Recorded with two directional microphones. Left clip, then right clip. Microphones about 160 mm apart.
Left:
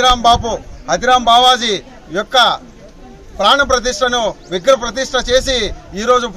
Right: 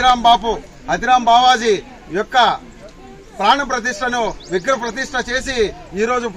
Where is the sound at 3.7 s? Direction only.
20° left (ahead or behind).